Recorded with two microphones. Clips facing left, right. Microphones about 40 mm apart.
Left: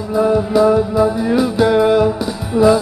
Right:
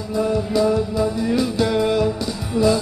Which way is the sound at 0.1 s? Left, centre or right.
Centre.